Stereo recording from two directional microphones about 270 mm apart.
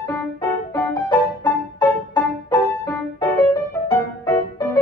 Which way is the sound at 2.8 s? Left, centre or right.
Centre.